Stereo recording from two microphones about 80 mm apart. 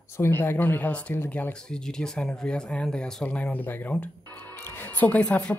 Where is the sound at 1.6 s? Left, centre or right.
Centre.